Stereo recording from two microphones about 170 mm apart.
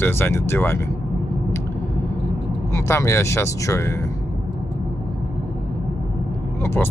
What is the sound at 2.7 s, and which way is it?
Speech, 15° left (ahead or behind).